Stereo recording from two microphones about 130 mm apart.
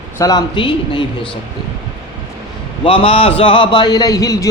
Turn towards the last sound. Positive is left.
turn(degrees=25)  # may be behind; listen again after turning